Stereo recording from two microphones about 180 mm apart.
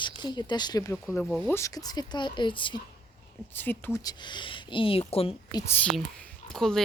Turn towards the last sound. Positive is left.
turn(degrees=0)  # may be behind; listen again after turning